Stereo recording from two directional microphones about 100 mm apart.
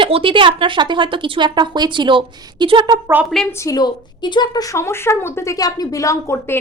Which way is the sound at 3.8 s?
45° left (ahead or behind).